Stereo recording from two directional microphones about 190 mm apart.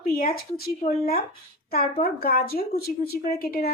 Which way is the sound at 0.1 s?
50° left (ahead or behind).